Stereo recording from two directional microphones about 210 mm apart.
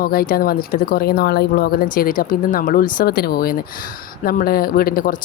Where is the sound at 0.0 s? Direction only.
45° left (ahead or behind).